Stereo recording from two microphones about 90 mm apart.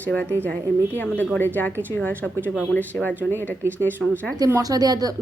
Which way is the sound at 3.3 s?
25° right (ahead or behind).